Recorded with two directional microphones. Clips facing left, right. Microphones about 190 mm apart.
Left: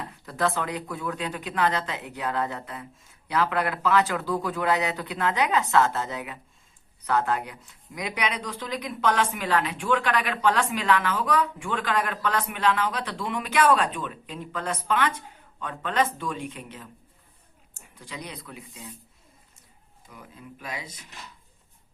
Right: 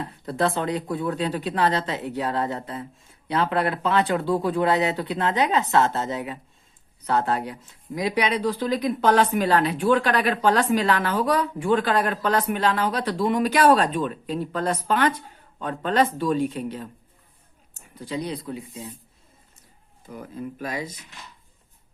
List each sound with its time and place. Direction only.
0.0 s speech: 30° right (ahead or behind)
17.9 s speech: 30° right (ahead or behind)
20.1 s speech: 45° right (ahead or behind)